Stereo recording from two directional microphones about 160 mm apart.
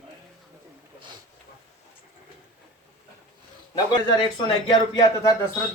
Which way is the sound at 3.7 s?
25° left (ahead or behind).